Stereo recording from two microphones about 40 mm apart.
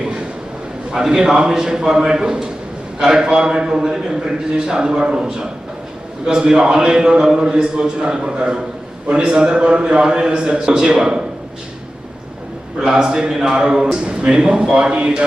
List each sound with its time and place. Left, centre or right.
0.9 s a man's voice: centre
12.8 s a man's voice: centre